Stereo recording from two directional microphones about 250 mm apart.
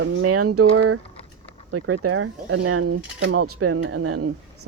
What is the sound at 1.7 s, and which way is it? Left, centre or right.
Speech, right.